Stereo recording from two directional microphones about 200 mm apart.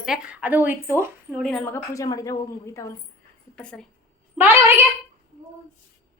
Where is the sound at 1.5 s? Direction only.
5° left (ahead or behind).